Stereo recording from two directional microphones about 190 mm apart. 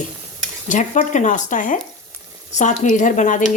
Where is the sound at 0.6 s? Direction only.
40° left (ahead or behind).